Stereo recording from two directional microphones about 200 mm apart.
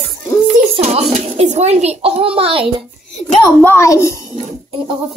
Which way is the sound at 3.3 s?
10° left (ahead or behind).